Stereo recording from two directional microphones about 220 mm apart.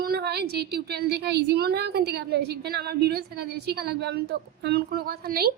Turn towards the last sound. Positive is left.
turn(degrees=-45)  # may be behind; listen again after turning